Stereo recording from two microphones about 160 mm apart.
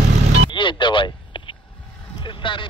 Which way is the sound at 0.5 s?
30° left (ahead or behind).